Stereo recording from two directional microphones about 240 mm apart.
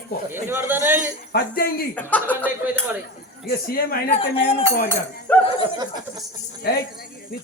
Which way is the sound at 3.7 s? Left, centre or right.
Left.